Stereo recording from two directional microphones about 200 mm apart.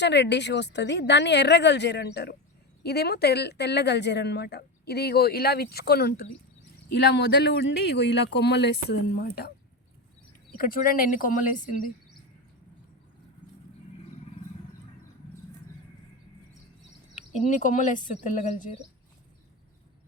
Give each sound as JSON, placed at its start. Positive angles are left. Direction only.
{"t": 0.0, "sound": "a woman's voice", "side_deg": 60}
{"t": 10.6, "sound": "a woman's voice", "side_deg": 45}
{"t": 17.4, "sound": "speech", "side_deg": 35}